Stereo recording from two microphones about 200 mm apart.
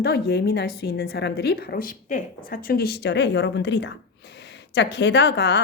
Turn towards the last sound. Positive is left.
turn(degrees=60)  # may be behind; listen again after turning